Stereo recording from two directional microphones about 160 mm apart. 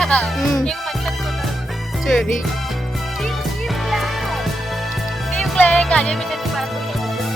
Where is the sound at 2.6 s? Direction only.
Centre (ahead or behind).